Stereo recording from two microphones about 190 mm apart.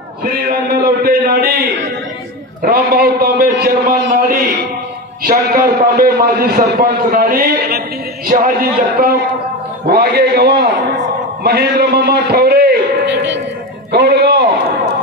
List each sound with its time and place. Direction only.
0.2 s a man's voice: 55° right (ahead or behind)
2.6 s a man's voice: 50° right (ahead or behind)